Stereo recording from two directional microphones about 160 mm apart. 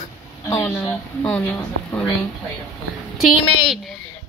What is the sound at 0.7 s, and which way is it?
Speech, 5° left (ahead or behind).